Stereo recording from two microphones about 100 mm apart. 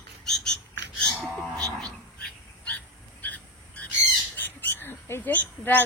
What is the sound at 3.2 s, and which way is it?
Frog, 15° left (ahead or behind).